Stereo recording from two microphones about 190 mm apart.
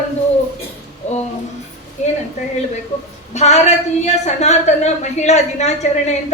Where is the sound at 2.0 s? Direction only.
40° left (ahead or behind).